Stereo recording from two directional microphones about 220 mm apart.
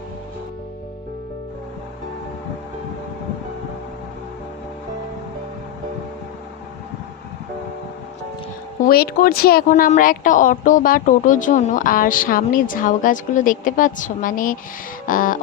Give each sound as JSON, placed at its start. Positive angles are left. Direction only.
{"t": 8.8, "sound": "speech", "side_deg": 45}